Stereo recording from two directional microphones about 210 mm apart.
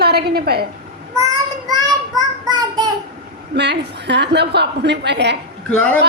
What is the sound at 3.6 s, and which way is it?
A woman's voice, 55° right (ahead or behind).